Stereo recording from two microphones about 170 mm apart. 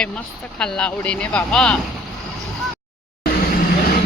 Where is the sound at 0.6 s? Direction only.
5° left (ahead or behind).